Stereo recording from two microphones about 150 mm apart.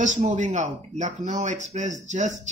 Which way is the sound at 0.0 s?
55° right (ahead or behind).